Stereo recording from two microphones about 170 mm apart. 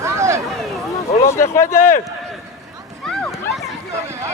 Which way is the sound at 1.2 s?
15° left (ahead or behind).